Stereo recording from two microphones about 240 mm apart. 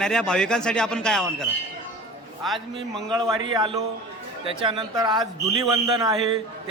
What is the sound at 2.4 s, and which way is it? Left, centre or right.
Speech, centre.